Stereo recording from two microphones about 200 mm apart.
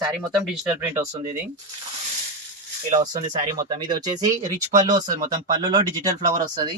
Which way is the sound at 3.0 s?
20° right (ahead or behind).